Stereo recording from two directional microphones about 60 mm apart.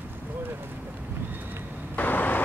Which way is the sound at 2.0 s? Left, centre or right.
Left.